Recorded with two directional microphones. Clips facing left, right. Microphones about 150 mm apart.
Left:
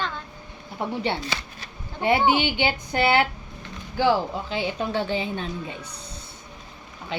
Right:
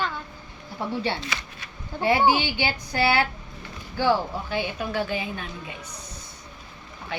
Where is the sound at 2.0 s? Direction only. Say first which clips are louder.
Even; 20° left (ahead or behind).